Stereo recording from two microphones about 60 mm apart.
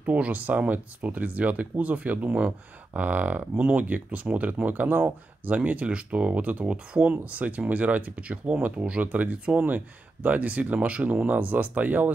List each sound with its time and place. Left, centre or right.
0.0 s speech: right